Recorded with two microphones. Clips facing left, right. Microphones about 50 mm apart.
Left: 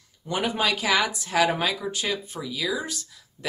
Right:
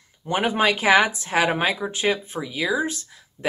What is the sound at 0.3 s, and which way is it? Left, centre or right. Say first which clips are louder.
Speech: right 4 dB; right.